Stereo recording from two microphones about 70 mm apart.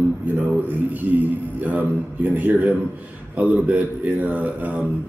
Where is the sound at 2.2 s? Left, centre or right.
Right.